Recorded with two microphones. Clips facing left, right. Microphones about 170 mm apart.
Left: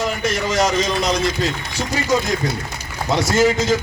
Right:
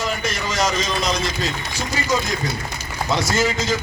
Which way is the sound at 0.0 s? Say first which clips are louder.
Left 4 dB; 60° left (ahead or behind).